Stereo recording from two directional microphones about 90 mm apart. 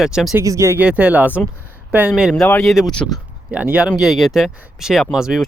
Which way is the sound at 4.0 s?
Centre (ahead or behind).